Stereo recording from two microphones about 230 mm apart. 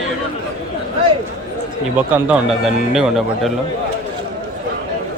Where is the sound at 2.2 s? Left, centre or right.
Centre.